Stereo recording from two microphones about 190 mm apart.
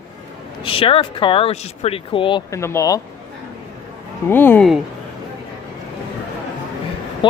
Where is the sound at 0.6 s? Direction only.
30° left (ahead or behind).